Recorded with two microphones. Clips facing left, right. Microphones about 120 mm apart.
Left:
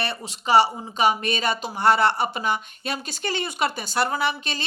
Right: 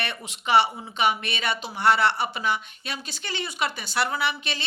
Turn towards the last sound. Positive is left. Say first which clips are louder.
# left 2 dB
turn(degrees=45)  # may be behind; listen again after turning